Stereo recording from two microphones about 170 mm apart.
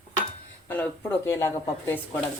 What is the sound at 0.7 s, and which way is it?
Speech, 10° left (ahead or behind).